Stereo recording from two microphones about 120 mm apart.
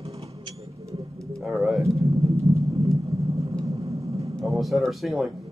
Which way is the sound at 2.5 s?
25° right (ahead or behind).